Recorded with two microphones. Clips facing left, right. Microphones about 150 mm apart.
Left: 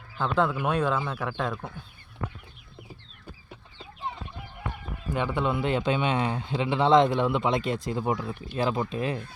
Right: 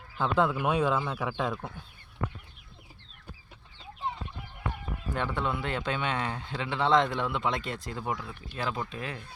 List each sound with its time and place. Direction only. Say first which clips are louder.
0.2 s speech: left 1 dB; 5° right (ahead or behind)
5.1 s a man's voice: left 4 dB; 10° left (ahead or behind)